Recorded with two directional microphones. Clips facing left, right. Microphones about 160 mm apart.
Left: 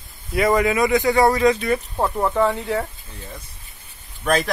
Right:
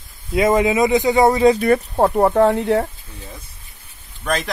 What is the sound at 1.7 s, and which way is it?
Speech, 60° right (ahead or behind).